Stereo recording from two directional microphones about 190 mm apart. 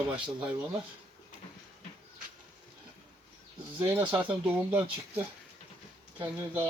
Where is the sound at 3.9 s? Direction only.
10° right (ahead or behind).